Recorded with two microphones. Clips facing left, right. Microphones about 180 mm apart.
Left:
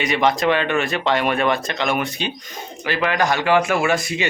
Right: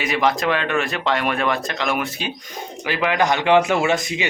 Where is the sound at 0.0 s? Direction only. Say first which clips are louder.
Left 2 dB; centre (ahead or behind).